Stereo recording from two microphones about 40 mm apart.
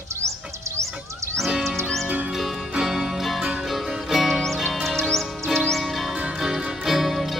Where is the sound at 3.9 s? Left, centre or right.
Centre.